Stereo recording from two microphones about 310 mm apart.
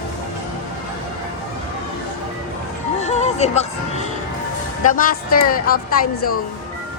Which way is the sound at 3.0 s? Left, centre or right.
Left.